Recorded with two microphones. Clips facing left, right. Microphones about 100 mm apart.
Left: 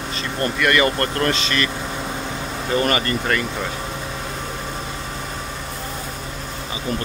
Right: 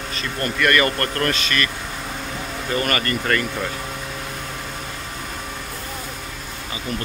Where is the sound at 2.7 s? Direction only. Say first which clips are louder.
Left 3 dB; 20° left (ahead or behind).